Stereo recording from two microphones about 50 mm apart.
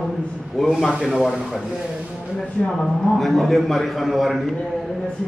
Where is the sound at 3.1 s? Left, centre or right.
Centre.